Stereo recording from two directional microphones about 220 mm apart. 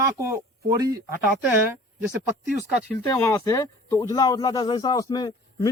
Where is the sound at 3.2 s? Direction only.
15° left (ahead or behind).